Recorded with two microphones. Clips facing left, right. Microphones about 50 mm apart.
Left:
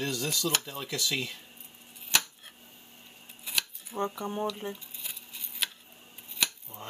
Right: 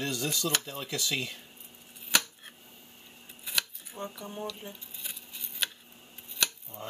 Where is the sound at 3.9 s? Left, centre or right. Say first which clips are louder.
Left 7 dB; left.